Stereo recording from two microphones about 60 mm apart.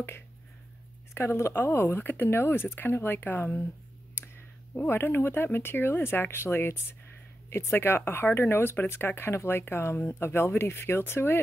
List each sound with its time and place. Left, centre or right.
1.1 s speech: left
4.8 s speech: left